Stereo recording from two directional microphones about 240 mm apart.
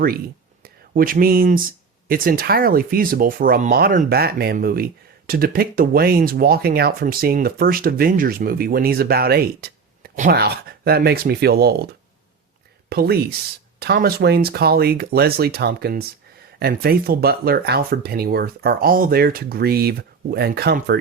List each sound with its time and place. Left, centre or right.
0.9 s speech: right
12.9 s speech: right